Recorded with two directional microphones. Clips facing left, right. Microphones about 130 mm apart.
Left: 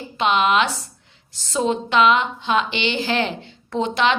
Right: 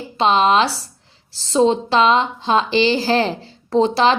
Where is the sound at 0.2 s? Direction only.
35° right (ahead or behind).